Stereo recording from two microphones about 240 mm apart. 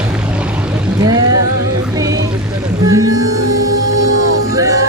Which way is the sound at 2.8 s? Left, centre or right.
Centre.